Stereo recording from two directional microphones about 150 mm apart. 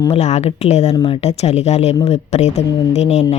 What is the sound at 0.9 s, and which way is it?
A woman's voice, 35° left (ahead or behind).